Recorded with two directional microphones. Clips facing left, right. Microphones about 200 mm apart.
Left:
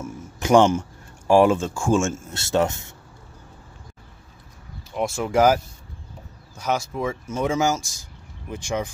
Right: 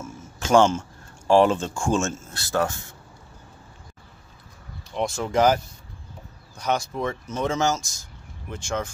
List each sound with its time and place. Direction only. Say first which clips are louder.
0.0 s speech: left 4 dB; 15° left (ahead or behind)
2.3 s speech: left 4 dB; 25° left (ahead or behind)
4.9 s speech: left 2 dB; 5° left (ahead or behind)